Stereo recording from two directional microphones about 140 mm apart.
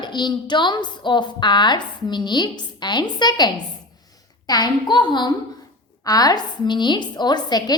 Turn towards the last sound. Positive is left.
turn(degrees=30)  # may be behind; listen again after turning